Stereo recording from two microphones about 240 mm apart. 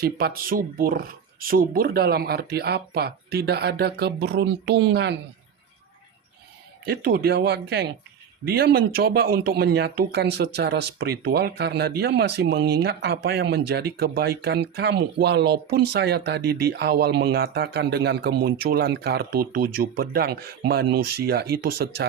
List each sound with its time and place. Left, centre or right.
0.0 s speech: right
6.8 s speech: right